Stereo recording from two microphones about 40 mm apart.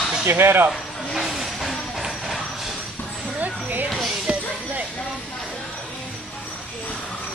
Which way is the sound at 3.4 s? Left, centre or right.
Right.